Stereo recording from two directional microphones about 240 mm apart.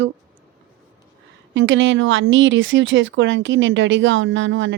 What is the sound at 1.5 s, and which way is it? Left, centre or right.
Speech, right.